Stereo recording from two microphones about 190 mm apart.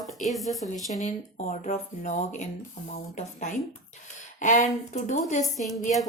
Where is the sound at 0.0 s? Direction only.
Centre (ahead or behind).